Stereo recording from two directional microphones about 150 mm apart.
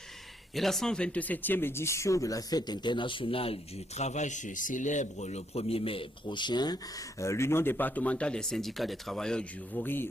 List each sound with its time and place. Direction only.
0.5 s speech: centre (ahead or behind)